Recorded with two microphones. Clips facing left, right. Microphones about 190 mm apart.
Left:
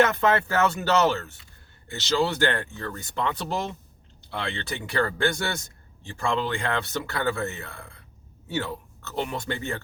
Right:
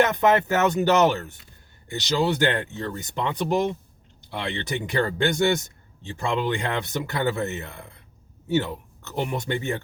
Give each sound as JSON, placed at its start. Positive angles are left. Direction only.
{"t": 0.0, "sound": "speech", "side_deg": -15}